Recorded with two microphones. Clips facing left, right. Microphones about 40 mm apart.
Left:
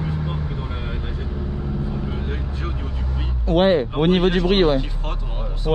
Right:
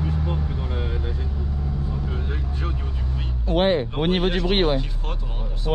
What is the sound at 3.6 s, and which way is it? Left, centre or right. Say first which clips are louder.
Speech: left 3 dB; left.